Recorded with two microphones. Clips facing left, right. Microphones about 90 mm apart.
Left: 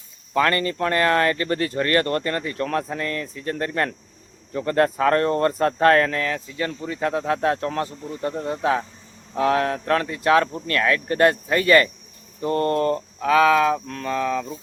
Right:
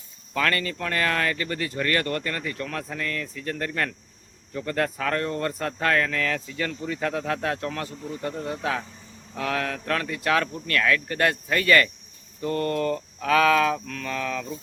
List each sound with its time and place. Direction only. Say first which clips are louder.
0.3 s speech: left 5 dB; 30° left (ahead or behind)
6.2 s speech: left 2 dB; 25° left (ahead or behind); by 13.0 s 40° left (ahead or behind)
13.1 s speech: left 3 dB; 20° left (ahead or behind)
13.8 s speech: left 6 dB; 35° left (ahead or behind)